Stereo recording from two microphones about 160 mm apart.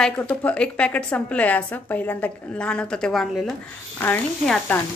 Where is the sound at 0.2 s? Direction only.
10° left (ahead or behind).